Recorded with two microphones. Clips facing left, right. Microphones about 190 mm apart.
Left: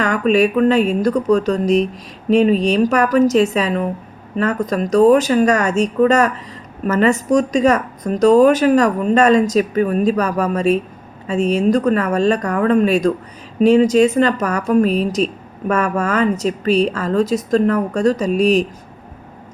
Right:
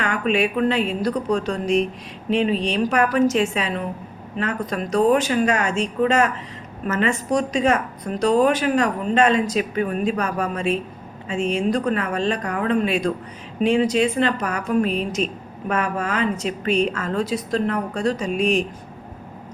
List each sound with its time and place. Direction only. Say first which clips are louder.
0.0 s a woman's voice: left 6 dB; 40° left (ahead or behind)